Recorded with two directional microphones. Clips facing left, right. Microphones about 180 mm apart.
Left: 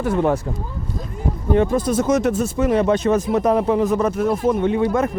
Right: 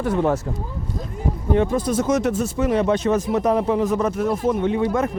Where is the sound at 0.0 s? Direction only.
10° left (ahead or behind).